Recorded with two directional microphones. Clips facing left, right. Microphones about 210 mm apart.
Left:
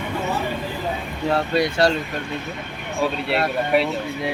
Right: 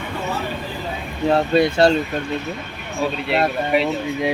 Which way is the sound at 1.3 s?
25° right (ahead or behind).